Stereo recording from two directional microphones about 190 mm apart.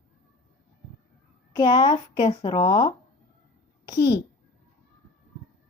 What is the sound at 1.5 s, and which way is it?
Speech, 20° left (ahead or behind).